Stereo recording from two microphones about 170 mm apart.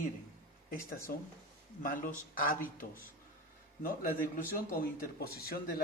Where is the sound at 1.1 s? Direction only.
60° left (ahead or behind).